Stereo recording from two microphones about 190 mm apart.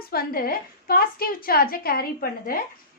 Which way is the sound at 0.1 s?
50° left (ahead or behind).